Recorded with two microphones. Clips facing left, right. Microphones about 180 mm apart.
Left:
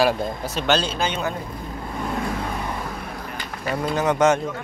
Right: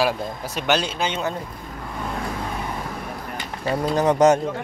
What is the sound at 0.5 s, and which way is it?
Speech, 15° right (ahead or behind).